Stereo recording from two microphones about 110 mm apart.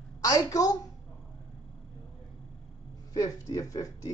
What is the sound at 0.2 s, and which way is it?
Speech, 35° left (ahead or behind).